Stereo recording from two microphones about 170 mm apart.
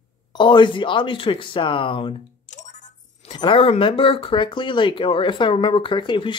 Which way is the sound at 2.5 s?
45° left (ahead or behind).